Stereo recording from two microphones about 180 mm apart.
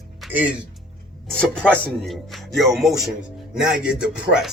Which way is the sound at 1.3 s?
5° left (ahead or behind).